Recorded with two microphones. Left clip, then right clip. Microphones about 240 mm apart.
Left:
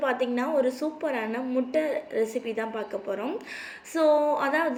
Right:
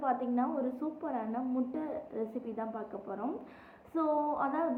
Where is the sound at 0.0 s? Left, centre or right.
Centre.